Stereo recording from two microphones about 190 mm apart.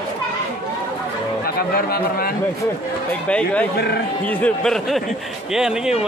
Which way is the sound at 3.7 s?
55° left (ahead or behind).